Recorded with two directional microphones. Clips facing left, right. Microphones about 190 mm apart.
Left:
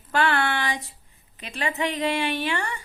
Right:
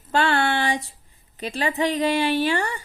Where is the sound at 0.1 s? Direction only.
30° right (ahead or behind).